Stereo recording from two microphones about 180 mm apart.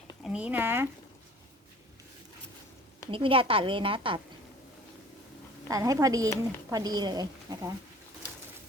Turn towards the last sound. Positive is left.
turn(degrees=-20)  # may be behind; listen again after turning